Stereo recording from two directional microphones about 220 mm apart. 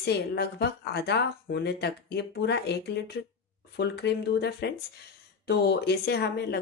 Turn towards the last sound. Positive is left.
turn(degrees=50)  # may be behind; listen again after turning